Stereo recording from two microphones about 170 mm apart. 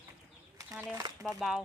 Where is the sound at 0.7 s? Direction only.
15° right (ahead or behind).